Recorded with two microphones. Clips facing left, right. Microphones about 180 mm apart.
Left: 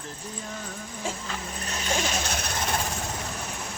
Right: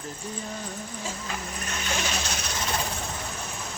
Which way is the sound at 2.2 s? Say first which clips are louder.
Left 2 dB; 55° left (ahead or behind).